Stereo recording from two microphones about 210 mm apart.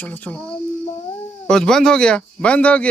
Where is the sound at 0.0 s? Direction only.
5° left (ahead or behind).